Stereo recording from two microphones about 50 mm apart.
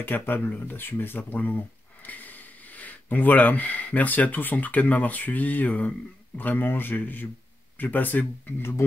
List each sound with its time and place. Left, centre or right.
0.0 s speech: left